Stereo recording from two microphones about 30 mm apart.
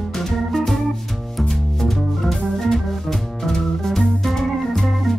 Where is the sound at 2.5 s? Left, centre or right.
Centre.